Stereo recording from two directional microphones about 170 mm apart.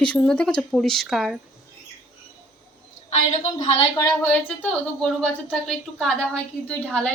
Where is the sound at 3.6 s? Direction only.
40° left (ahead or behind).